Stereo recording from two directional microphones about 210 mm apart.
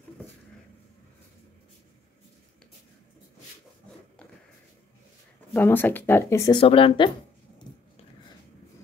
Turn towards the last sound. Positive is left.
turn(degrees=25)  # may be behind; listen again after turning